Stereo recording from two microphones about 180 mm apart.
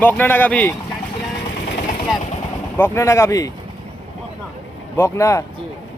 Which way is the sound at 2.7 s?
10° left (ahead or behind).